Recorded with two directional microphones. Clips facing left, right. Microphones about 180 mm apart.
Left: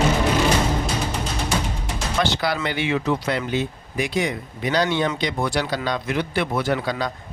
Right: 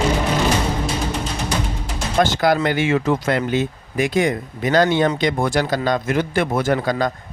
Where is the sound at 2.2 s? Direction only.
45° right (ahead or behind).